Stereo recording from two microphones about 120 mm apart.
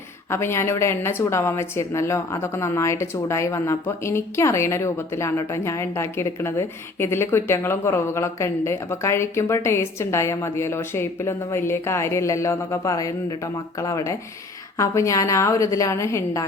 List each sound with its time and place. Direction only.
0.3 s a woman's voice: 20° left (ahead or behind)